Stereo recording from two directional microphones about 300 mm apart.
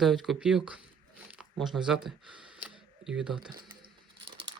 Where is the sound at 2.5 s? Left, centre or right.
Centre.